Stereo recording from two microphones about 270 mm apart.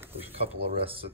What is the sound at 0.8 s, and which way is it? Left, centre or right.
Speech, right.